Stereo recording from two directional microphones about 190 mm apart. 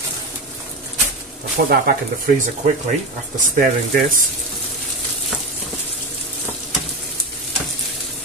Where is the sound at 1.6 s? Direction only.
55° right (ahead or behind).